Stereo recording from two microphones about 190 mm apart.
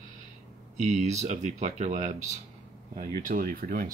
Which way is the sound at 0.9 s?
35° right (ahead or behind).